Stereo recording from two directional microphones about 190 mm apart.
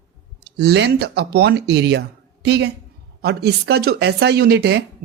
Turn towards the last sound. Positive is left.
turn(degrees=-60)  # may be behind; listen again after turning